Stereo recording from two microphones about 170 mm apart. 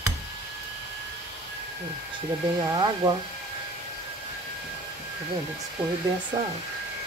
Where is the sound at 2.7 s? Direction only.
25° right (ahead or behind).